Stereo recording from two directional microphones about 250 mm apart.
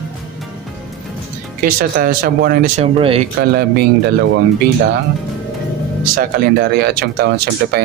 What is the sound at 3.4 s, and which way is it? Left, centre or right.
Speech, right.